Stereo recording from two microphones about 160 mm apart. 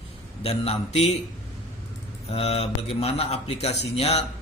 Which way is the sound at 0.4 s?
40° left (ahead or behind).